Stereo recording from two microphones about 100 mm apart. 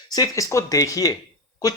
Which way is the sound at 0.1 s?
40° left (ahead or behind).